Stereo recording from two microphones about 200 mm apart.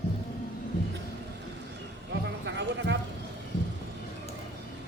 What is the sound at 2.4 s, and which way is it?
Music, 60° right (ahead or behind).